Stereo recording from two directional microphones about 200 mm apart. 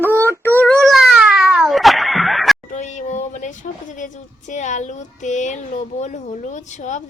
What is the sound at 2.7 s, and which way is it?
Speech, 35° left (ahead or behind).